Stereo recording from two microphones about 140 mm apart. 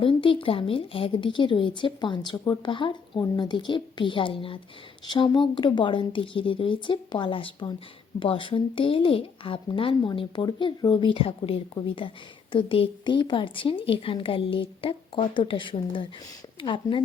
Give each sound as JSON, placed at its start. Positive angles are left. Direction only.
{"t": 0.0, "sound": "speech", "side_deg": 40}